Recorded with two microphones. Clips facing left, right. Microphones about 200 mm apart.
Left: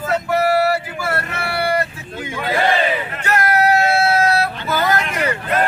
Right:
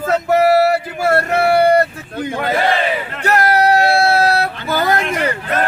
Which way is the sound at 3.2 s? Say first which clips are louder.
Right 3 dB; 35° right (ahead or behind).